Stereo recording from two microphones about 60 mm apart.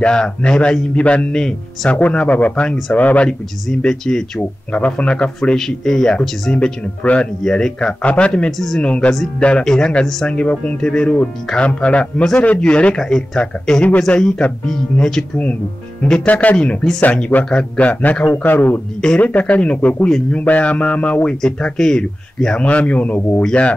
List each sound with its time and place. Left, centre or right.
0.0 s speech: centre
1.3 s speech: centre
1.9 s speech: left
3.3 s speech: centre
4.4 s speech: left
8.5 s speech: centre
8.8 s speech: centre
16.3 s speech: left
16.5 s speech: centre
17.0 s a man's voice: left
18.9 s speech: centre
20.1 s speech: centre
20.3 s speech: left
22.6 s speech: left